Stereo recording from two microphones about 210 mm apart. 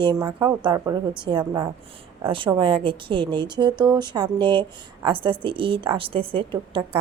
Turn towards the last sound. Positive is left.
turn(degrees=-25)  # may be behind; listen again after turning